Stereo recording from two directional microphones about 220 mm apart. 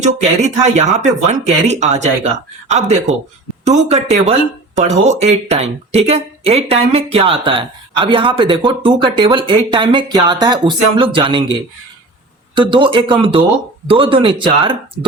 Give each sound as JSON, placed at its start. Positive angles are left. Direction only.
{"t": 0.2, "sound": "speech", "side_deg": -30}
{"t": 12.5, "sound": "speech", "side_deg": -20}